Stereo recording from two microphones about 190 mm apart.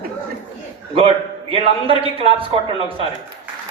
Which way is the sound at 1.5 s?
30° right (ahead or behind).